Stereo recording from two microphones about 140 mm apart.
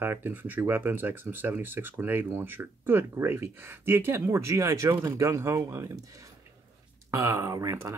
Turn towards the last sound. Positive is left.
turn(degrees=-20)  # may be behind; listen again after turning